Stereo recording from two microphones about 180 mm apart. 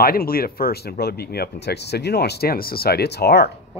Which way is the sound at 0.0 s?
55° left (ahead or behind).